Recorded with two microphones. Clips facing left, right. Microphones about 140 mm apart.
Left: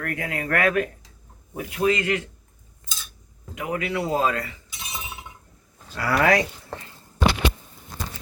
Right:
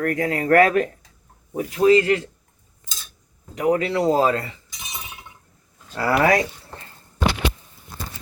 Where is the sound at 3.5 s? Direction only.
35° right (ahead or behind).